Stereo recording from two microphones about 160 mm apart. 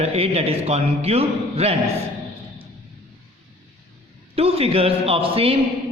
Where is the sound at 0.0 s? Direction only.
40° right (ahead or behind).